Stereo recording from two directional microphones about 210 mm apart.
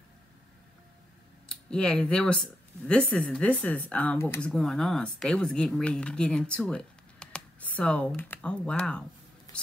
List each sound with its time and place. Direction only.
1.5 s speech: 5° left (ahead or behind)
9.5 s whispering: 15° left (ahead or behind)